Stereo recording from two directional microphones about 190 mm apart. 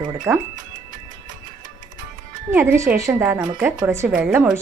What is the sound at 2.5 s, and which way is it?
Speech, 15° right (ahead or behind).